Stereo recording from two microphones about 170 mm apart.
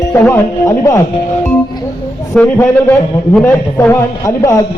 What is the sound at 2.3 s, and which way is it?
Music, 5° left (ahead or behind).